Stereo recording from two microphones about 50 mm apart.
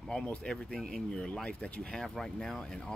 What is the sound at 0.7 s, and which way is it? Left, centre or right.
Speech, centre.